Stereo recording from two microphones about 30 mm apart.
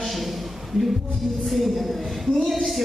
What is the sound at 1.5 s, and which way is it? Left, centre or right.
Speech, centre.